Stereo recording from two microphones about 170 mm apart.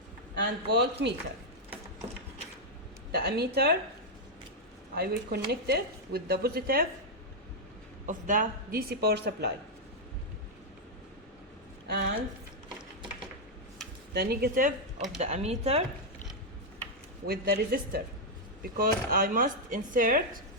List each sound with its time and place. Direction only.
0.3 s speech: 80° right
3.1 s speech: 70° right (ahead or behind)
4.9 s speech: 65° right (ahead or behind)
8.0 s speech: 50° right (ahead or behind); by 9.5 s 80° right
11.9 s speech: 70° right (ahead or behind)
14.1 s speech: 70° right (ahead or behind)
15.2 s speech: 40° right (ahead or behind)
17.2 s speech: 65° right (ahead or behind)